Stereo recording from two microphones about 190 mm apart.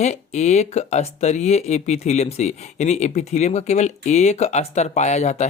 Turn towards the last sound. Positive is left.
turn(degrees=35)  # may be behind; listen again after turning